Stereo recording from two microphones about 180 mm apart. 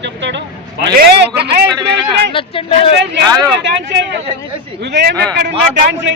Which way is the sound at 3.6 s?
80° right.